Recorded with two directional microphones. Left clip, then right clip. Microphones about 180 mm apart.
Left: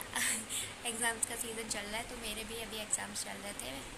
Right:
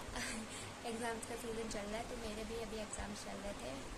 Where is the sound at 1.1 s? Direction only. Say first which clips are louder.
Left 8 dB; 5° right (ahead or behind).